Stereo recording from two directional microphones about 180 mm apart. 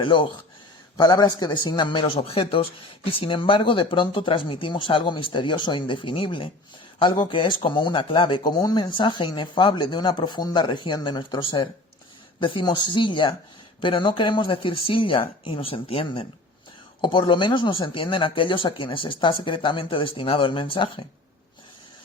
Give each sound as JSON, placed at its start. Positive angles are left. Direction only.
{"t": 0.0, "sound": "a man's voice", "side_deg": 25}